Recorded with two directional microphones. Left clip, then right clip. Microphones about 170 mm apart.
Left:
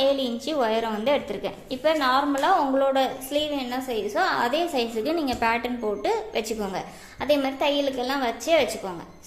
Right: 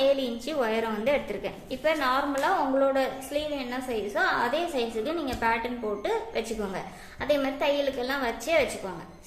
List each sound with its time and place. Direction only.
0.0 s a woman's voice: 30° left (ahead or behind)